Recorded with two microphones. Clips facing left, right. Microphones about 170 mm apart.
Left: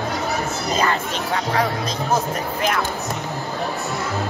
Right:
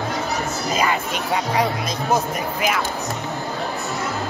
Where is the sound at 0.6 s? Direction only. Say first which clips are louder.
Even; 10° right (ahead or behind).